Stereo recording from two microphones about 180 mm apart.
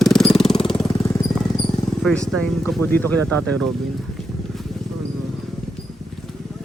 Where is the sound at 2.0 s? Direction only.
5° left (ahead or behind).